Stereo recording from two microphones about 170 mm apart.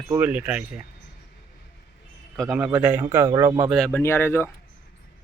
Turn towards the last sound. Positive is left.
turn(degrees=15)  # may be behind; listen again after turning